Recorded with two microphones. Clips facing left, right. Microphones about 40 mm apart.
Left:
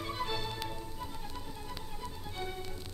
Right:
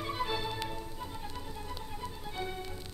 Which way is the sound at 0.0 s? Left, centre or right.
Centre.